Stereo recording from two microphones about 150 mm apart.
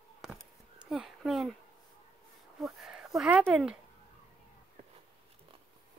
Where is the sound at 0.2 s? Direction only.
Centre (ahead or behind).